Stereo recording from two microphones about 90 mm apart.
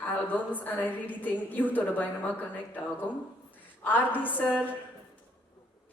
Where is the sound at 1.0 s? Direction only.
20° left (ahead or behind).